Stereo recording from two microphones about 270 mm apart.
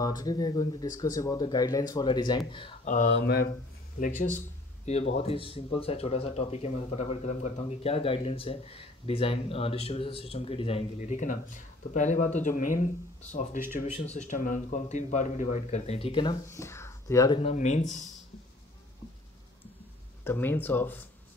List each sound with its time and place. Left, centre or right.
0.0 s speech: centre; by 3.4 s left
4.8 s speech: left
20.2 s speech: centre